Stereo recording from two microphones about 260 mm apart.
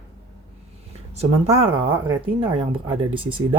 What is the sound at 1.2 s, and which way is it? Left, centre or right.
Speech, right.